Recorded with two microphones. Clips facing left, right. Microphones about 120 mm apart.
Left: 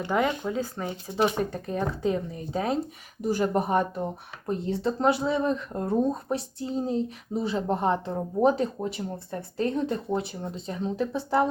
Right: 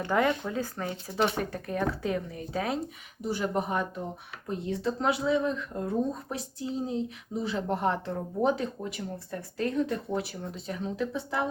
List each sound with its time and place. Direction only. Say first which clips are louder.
0.0 s speech: left 1 dB; 15° left (ahead or behind)
3.2 s speech: left 5 dB; 45° left (ahead or behind); by 8.2 s 20° left (ahead or behind)
8.4 s speech: left 5 dB; 35° left (ahead or behind)